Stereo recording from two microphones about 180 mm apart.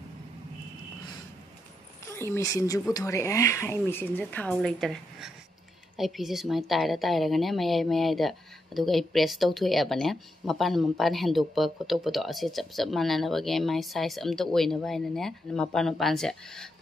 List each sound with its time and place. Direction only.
2.1 s speech: 15° left (ahead or behind)